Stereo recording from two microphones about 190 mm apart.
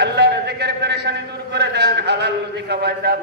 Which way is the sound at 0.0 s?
60° right (ahead or behind).